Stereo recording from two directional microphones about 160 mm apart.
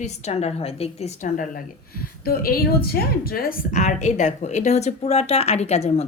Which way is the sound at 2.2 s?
65° left (ahead or behind).